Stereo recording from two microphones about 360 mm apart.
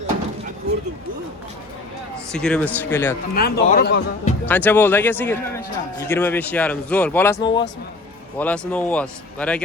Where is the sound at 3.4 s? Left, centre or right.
Left.